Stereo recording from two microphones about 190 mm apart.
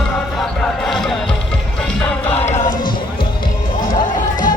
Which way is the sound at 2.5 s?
40° left (ahead or behind).